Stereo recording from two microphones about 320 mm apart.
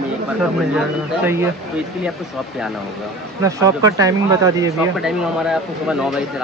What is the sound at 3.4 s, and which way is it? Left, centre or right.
Speech, centre.